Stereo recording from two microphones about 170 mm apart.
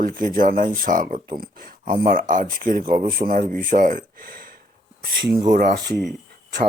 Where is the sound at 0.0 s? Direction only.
55° right (ahead or behind).